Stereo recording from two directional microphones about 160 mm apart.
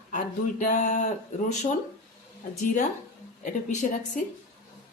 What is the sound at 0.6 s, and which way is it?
Speech, 50° left (ahead or behind).